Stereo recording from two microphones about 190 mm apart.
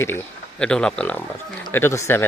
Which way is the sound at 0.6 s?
5° left (ahead or behind).